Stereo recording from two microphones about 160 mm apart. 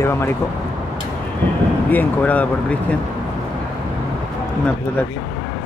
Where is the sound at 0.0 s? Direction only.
15° left (ahead or behind).